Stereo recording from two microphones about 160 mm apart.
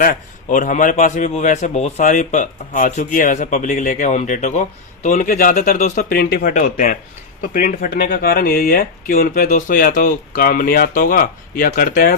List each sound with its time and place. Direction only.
0.0 s a man's voice: 55° left (ahead or behind)
6.5 s speech: 55° left (ahead or behind)